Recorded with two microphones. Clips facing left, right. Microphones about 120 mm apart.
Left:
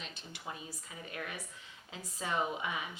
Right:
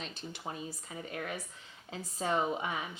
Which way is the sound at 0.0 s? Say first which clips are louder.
Right 4 dB; 35° right (ahead or behind).